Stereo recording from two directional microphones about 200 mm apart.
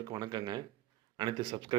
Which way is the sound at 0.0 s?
20° right (ahead or behind).